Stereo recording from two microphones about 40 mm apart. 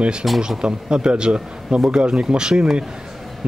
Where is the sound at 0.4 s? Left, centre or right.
Right.